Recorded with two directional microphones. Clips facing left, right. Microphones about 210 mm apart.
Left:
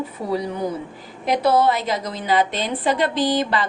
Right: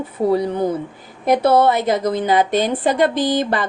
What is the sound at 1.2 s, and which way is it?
A woman's voice, 55° right (ahead or behind).